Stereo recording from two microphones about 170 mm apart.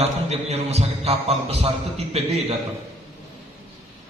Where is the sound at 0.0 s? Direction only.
40° right (ahead or behind).